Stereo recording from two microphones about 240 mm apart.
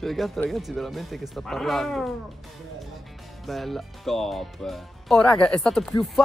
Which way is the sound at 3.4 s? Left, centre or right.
Centre.